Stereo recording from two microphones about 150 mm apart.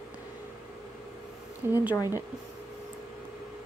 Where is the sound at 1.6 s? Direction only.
20° right (ahead or behind).